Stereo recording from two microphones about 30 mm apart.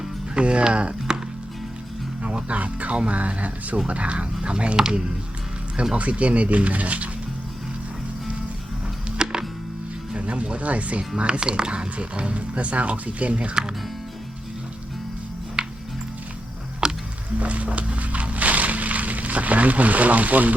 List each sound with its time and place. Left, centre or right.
0.3 s speech: right
2.2 s music: right
3.2 s speech: right
3.8 s speech: right
6.0 s speech: right
9.2 s music: right
10.2 s speech: right
11.3 s speech: right
11.7 s speech: right
15.6 s music: right
16.8 s music: right
17.4 s a sound: right